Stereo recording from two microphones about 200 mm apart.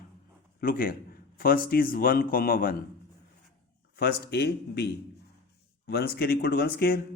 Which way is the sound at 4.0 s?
55° left (ahead or behind).